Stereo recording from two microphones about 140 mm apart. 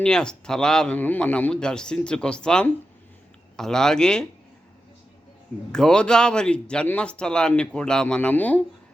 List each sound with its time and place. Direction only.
0.0 s speech: 5° left (ahead or behind)
5.7 s speech: 5° left (ahead or behind)